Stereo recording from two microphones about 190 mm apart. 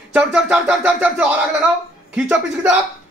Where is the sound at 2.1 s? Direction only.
5° right (ahead or behind).